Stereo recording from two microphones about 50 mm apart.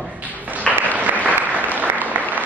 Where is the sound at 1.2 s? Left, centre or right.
Right.